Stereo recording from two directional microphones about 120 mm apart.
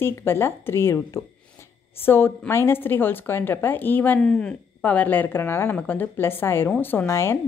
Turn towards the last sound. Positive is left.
turn(degrees=20)  # may be behind; listen again after turning